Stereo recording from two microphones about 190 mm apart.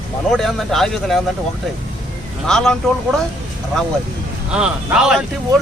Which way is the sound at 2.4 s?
5° left (ahead or behind).